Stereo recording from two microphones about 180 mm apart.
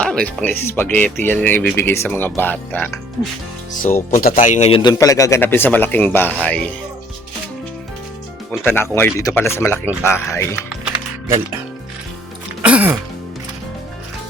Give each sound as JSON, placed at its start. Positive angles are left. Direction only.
{"t": 0.0, "sound": "speech", "side_deg": 5}
{"t": 4.1, "sound": "speech", "side_deg": 50}
{"t": 4.8, "sound": "speech", "side_deg": 20}
{"t": 8.6, "sound": "speech", "side_deg": 10}
{"t": 10.5, "sound": "music", "side_deg": -10}
{"t": 12.6, "sound": "music", "side_deg": -5}